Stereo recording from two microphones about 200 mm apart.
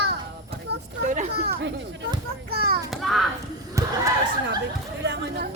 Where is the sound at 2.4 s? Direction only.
50° right (ahead or behind).